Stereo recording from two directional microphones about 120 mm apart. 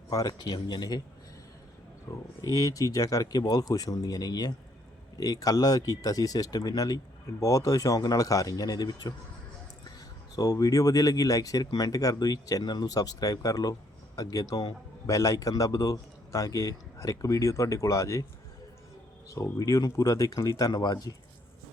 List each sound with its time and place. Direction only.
0.1 s speech: 35° left (ahead or behind)
2.1 s a man's voice: 25° left (ahead or behind)
10.3 s a man's voice: 30° left (ahead or behind)
19.3 s speech: 30° left (ahead or behind)